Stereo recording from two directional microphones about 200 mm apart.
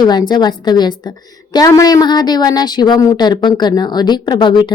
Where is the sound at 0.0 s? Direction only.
20° left (ahead or behind).